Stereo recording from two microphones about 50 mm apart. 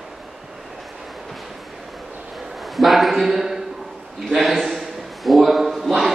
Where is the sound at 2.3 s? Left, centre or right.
Centre.